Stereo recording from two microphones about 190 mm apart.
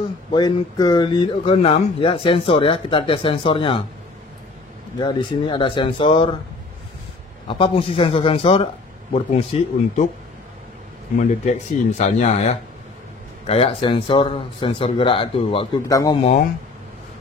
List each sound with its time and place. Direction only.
0.3 s speech: 20° left (ahead or behind)
4.9 s speech: 25° left (ahead or behind)
7.4 s speech: 30° left (ahead or behind)
11.1 s speech: 40° left (ahead or behind)
15.9 s speech: 20° left (ahead or behind)